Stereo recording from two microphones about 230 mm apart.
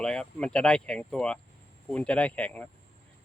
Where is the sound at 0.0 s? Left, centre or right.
Centre.